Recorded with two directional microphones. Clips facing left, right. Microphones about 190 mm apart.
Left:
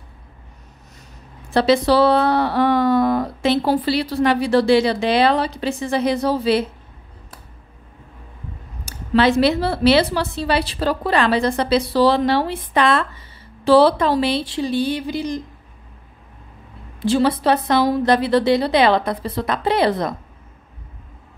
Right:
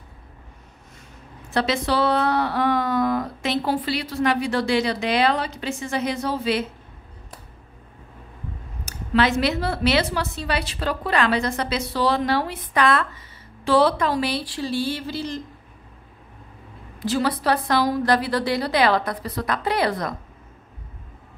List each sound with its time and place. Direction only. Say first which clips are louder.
1.5 s speech: left 7 dB; 35° left (ahead or behind)
8.8 s a woman's voice: left 4 dB; 30° left (ahead or behind); by 15.4 s 15° left (ahead or behind)
17.0 s a woman's voice: left 5 dB; 25° left (ahead or behind)